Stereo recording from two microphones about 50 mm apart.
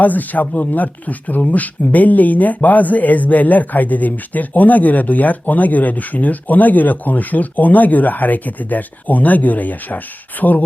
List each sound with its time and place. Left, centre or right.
0.0 s speech: left